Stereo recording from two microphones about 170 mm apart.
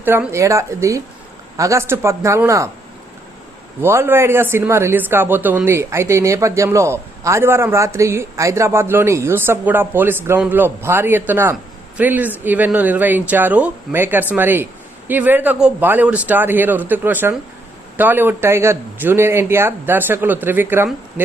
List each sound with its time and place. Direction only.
0.0 s speech: 10° right (ahead or behind)
3.8 s speech: 15° right (ahead or behind)